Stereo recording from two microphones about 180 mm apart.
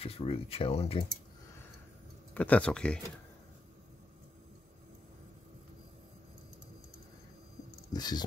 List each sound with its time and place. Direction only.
0.0 s speech: 35° left (ahead or behind)
2.3 s speech: 10° left (ahead or behind)
7.9 s speech: 25° left (ahead or behind)